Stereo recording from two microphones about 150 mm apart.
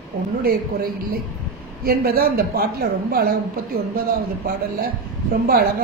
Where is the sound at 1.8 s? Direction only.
90° right.